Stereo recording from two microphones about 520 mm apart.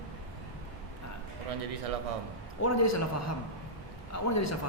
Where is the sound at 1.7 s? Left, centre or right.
Right.